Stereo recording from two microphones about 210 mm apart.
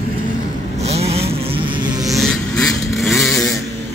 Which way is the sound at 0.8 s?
30° right (ahead or behind).